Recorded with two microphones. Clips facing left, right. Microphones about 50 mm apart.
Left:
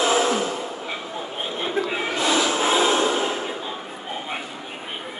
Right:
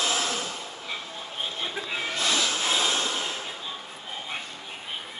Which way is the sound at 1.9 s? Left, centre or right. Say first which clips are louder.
Left 5 dB; centre.